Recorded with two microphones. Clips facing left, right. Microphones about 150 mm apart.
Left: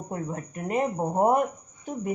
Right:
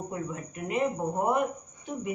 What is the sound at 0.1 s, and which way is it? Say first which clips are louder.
Speech: left 2 dB; 40° left (ahead or behind).